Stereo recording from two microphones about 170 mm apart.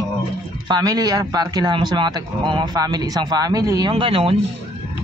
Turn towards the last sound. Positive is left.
turn(degrees=-30)  # may be behind; listen again after turning